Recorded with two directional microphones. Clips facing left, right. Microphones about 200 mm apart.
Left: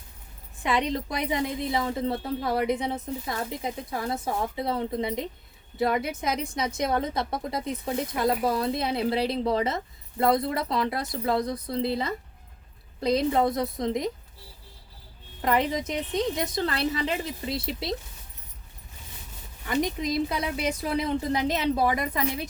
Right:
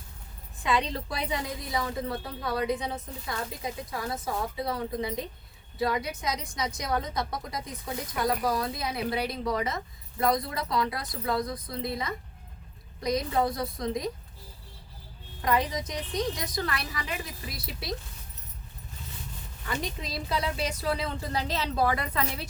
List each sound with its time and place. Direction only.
0.6 s a woman's voice: 20° left (ahead or behind)
15.4 s a woman's voice: 25° left (ahead or behind)
19.6 s a woman's voice: 20° left (ahead or behind)